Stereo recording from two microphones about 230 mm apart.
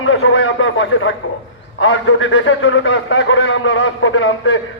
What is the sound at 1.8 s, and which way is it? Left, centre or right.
A man's voice, left.